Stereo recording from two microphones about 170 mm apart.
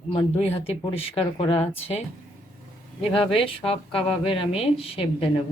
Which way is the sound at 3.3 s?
35° left (ahead or behind).